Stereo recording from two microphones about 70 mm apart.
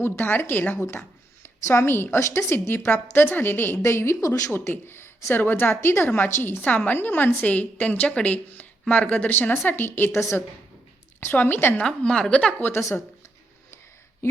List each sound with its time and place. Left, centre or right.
0.0 s a woman's voice: left
4.5 s a woman's voice: left
10.1 s a woman's voice: left
11.2 s a woman's voice: left
11.7 s a woman's voice: centre
12.5 s a woman's voice: left